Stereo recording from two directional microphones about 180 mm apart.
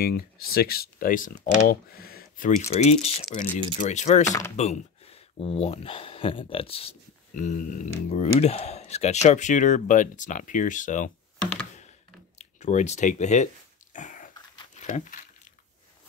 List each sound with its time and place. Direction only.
0.0 s speech: 55° left (ahead or behind)
2.7 s speech: 35° left (ahead or behind)
12.4 s speech: 40° left (ahead or behind)
13.9 s a sound: 45° left (ahead or behind)
14.8 s speech: 40° left (ahead or behind)